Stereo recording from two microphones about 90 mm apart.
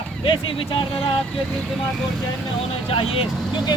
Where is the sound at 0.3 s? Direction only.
70° left (ahead or behind).